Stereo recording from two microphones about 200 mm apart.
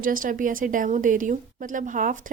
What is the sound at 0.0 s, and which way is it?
A woman's voice, 45° right (ahead or behind).